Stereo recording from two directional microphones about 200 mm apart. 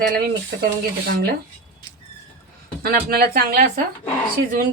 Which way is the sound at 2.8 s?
50° right (ahead or behind).